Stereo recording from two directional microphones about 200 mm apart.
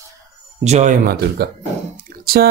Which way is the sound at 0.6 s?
35° right (ahead or behind).